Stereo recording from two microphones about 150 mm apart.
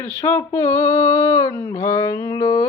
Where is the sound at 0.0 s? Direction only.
15° left (ahead or behind).